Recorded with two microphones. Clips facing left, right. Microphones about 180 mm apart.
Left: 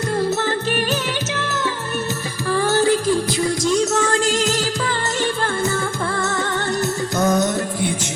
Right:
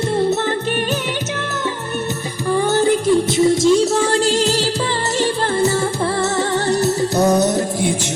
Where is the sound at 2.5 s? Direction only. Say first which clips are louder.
Right 2 dB; 20° right (ahead or behind); by 4.7 s 35° right (ahead or behind).